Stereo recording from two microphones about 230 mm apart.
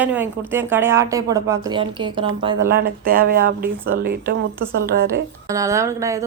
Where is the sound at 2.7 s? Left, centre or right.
Right.